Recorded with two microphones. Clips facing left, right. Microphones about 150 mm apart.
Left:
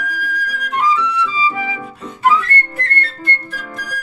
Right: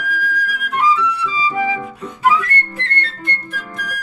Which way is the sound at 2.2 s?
10° right (ahead or behind).